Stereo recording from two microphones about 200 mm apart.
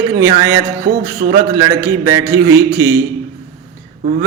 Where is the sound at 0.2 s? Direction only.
15° right (ahead or behind).